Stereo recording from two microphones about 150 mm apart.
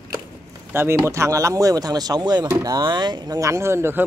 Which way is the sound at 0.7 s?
15° right (ahead or behind).